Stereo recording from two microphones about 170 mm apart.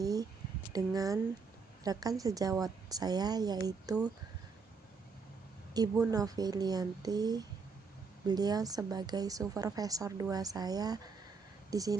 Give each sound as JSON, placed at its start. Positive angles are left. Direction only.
{"t": 0.0, "sound": "a sound", "side_deg": -20}
{"t": 0.7, "sound": "a woman's voice", "side_deg": -20}
{"t": 5.7, "sound": "a woman's voice", "side_deg": -20}